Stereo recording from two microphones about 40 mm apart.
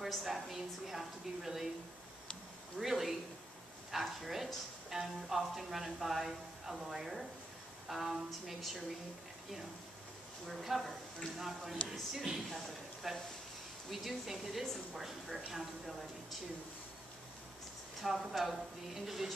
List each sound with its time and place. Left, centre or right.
0.0 s a woman's voice: centre
2.8 s a woman's voice: centre
10.4 s a woman's voice: centre
18.0 s a woman's voice: centre